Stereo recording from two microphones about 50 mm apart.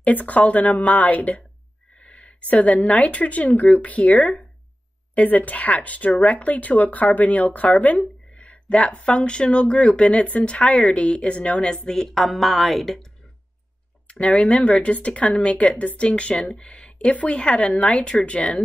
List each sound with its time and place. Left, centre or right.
0.0 s speech: left
11.7 s a woman's voice: centre
14.0 s speech: left